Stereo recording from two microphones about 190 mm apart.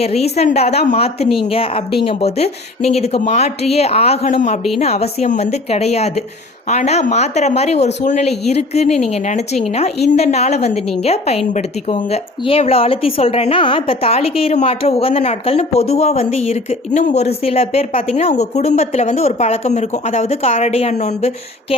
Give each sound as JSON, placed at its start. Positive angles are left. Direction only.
{"t": 0.0, "sound": "speech", "side_deg": 35}